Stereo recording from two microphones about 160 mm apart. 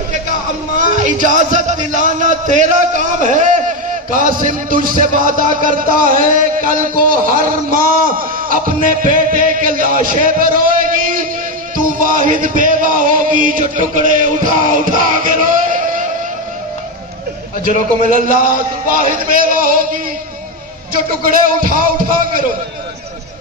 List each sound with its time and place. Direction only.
0.7 s a man's voice: 50° right (ahead or behind)
11.7 s music: 60° right (ahead or behind)
18.1 s speech: 60° right (ahead or behind)
21.5 s speech: 60° right (ahead or behind)